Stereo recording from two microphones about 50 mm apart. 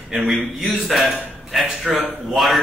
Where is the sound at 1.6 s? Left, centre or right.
Centre.